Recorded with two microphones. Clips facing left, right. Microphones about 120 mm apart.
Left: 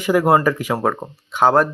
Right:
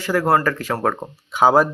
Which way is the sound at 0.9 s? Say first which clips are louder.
Even; centre (ahead or behind).